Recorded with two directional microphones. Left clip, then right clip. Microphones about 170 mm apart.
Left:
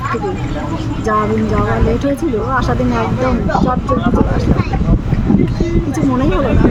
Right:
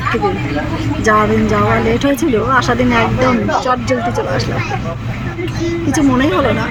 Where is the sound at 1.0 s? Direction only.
20° right (ahead or behind).